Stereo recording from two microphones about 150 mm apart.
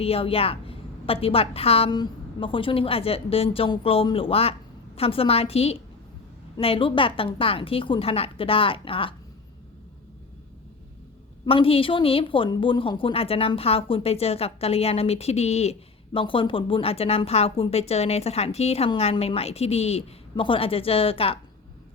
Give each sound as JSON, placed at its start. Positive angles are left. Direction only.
{"t": 0.0, "sound": "a woman's voice", "side_deg": 40}
{"t": 11.4, "sound": "a woman's voice", "side_deg": 40}